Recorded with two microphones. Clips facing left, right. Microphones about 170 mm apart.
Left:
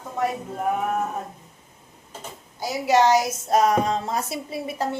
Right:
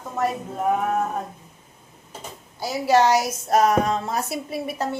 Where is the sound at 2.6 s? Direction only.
20° left (ahead or behind).